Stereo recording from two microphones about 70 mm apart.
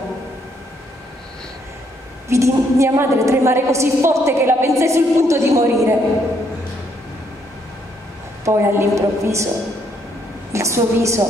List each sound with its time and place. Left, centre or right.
2.2 s a woman's voice: right
8.5 s a woman's voice: right
10.5 s a woman's voice: right